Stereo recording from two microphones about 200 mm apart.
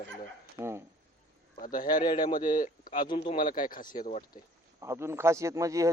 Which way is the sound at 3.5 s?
45° left (ahead or behind).